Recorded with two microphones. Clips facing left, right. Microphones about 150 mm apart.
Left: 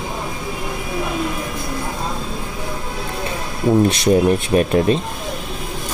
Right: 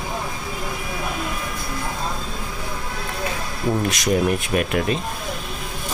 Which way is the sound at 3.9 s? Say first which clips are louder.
Left 5 dB; 30° left (ahead or behind).